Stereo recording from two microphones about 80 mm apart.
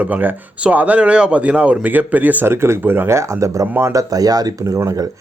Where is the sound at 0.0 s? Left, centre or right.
Right.